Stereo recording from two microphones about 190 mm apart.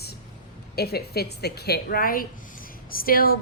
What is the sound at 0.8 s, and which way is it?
A woman's voice, 55° left (ahead or behind).